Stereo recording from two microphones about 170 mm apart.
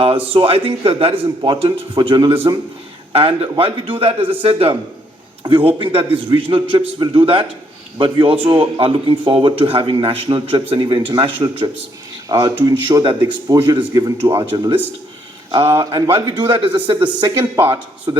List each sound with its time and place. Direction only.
0.3 s a man's voice: 30° right (ahead or behind); by 18.1 s 15° right (ahead or behind)